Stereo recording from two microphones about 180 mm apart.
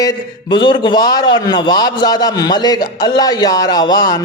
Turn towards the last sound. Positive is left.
turn(degrees=20)  # may be behind; listen again after turning